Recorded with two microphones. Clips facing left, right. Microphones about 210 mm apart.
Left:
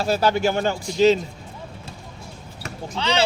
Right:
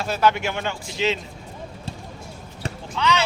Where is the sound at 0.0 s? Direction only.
35° left (ahead or behind).